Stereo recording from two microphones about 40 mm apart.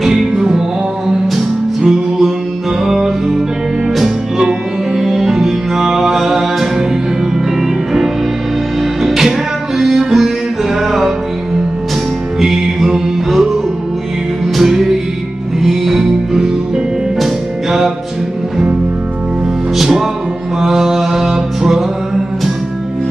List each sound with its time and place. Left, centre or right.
0.0 s music: centre
9.0 s music: centre
12.4 s music: centre
14.6 s music: centre
19.8 s music: centre